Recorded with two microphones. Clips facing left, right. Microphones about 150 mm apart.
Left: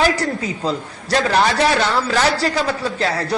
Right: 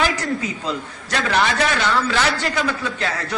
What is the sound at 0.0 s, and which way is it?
A man's voice, 35° left (ahead or behind).